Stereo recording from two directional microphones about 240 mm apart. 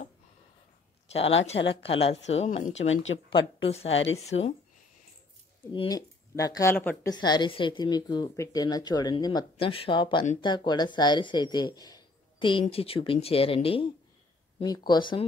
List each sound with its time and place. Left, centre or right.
1.1 s speech: left
2.9 s speech: left
3.6 s speech: left
3.9 s speech: left
4.3 s speech: left
5.7 s speech: centre